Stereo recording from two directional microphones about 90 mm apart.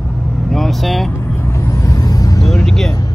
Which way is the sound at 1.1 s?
25° left (ahead or behind).